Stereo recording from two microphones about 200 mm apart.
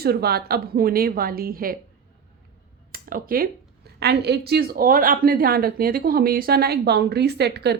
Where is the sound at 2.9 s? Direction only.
45° right (ahead or behind).